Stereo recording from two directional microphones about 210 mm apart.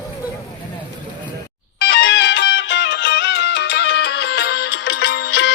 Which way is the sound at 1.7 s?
55° left (ahead or behind).